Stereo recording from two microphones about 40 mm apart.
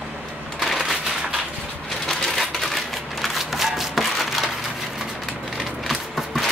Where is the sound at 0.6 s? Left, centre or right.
Centre.